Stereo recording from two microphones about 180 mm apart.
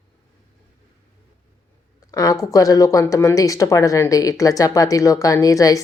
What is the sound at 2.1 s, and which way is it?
Speech, 20° left (ahead or behind).